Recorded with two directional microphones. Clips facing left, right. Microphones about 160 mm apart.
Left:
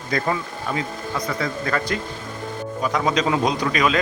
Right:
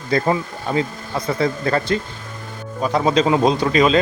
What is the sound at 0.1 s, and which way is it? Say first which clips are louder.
Speech: right 5 dB; 30° right (ahead or behind).